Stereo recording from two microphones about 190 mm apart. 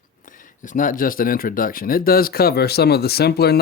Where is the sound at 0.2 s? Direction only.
45° left (ahead or behind).